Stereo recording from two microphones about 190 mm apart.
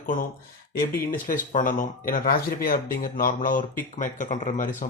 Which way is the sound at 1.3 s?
45° left (ahead or behind).